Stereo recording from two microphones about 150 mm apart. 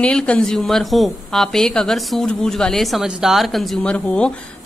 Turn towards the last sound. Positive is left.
turn(degrees=5)  # may be behind; listen again after turning